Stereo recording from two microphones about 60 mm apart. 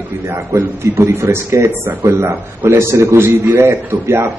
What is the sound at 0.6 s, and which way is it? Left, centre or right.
Speech, right.